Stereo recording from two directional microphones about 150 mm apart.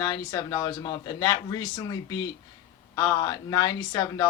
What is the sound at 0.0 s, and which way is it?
Speech, 25° left (ahead or behind).